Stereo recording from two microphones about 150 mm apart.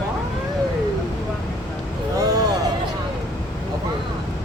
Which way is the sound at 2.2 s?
25° right (ahead or behind).